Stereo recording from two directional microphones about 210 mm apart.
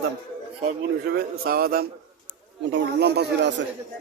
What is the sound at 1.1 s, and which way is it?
Speech, 45° right (ahead or behind).